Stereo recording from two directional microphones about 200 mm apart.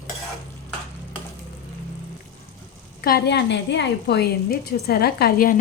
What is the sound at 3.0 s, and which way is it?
A woman's voice, 50° left (ahead or behind).